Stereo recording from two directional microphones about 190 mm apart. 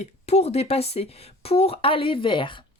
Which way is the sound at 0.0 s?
35° left (ahead or behind).